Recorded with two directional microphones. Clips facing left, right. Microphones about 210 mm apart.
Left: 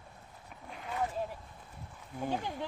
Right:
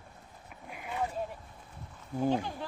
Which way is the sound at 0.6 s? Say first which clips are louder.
Right 1 dB; 10° right (ahead or behind).